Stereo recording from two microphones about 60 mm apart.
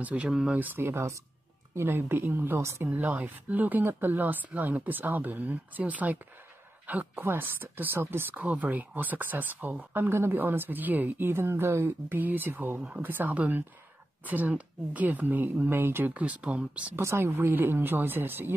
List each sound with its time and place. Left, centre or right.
0.0 s speech: right
0.3 s speech: centre
0.6 s speech: right
8.4 s speech: right
9.9 s speech: right
12.2 s speech: right
16.1 s speech: right
16.9 s speech: right